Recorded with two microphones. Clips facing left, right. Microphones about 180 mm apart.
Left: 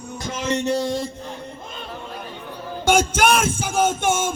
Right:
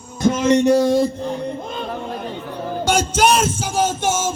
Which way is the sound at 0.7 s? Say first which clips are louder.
Right 8 dB; 40° right (ahead or behind).